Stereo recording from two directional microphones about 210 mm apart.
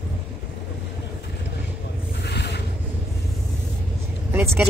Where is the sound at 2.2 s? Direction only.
55° left (ahead or behind).